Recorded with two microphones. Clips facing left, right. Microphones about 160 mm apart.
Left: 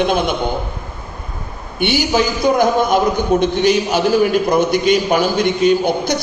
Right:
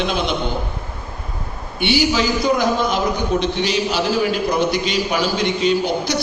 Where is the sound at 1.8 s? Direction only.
50° left (ahead or behind).